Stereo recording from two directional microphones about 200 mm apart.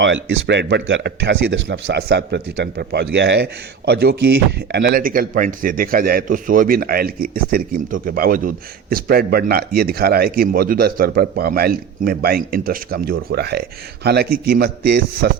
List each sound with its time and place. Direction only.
0.0 s speech: 65° right (ahead or behind)